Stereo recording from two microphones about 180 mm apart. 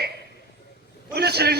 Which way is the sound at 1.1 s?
60° right (ahead or behind).